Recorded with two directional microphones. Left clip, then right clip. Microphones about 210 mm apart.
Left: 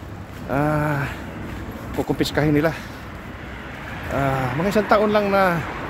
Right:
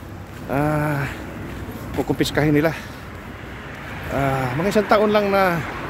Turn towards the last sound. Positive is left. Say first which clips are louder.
# even
turn(degrees=-60)  # may be behind; listen again after turning